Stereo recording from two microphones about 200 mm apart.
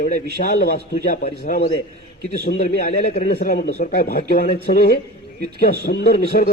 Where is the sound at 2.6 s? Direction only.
30° left (ahead or behind).